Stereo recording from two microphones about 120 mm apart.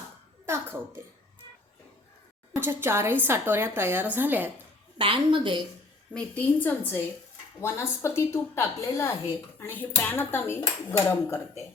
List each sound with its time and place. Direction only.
0.4 s a woman's voice: 20° right (ahead or behind)
2.6 s a woman's voice: 20° right (ahead or behind)
4.9 s a woman's voice: 45° right (ahead or behind)
6.1 s a woman's voice: 15° left (ahead or behind)